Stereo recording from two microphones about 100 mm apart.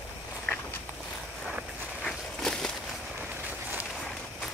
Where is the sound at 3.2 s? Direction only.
15° right (ahead or behind).